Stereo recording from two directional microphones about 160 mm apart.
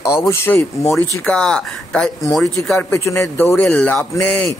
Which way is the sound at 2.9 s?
20° left (ahead or behind).